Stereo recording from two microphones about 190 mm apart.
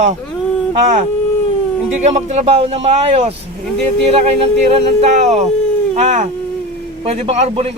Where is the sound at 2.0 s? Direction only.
35° right (ahead or behind).